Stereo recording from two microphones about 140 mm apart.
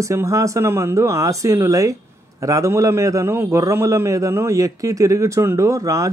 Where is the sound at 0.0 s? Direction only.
20° right (ahead or behind).